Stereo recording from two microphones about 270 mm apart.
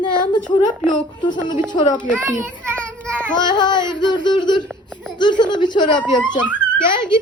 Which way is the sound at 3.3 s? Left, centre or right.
Centre.